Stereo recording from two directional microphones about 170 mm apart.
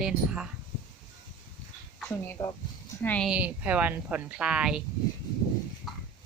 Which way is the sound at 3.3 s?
10° right (ahead or behind).